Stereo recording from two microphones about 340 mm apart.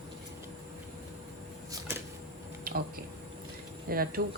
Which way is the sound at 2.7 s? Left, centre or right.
Right.